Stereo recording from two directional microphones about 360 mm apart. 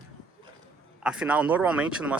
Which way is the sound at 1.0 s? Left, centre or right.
Centre.